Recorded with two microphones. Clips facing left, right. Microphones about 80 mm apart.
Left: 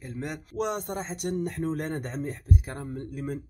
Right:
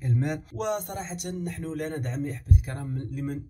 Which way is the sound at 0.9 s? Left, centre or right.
Left.